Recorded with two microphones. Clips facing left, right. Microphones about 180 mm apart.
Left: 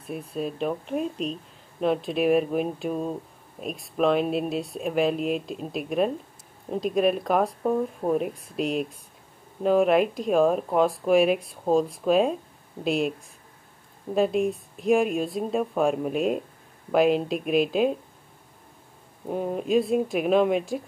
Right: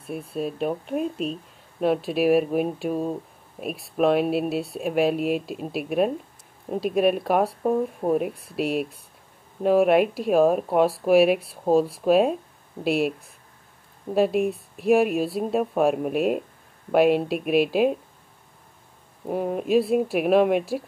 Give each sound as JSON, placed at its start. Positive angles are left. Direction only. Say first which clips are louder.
{"t": 0.0, "sound": "speech", "louder": "right 2 dB", "side_deg": -5}
{"t": 14.1, "sound": "speech", "louder": "right 2 dB", "side_deg": -5}
{"t": 19.2, "sound": "speech", "louder": "right 2 dB", "side_deg": -5}